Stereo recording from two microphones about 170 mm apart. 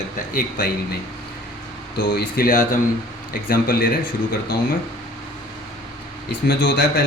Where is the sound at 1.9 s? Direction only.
65° left (ahead or behind).